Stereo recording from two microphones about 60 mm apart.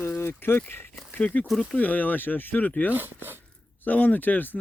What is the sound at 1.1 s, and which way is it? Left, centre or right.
Speech, left.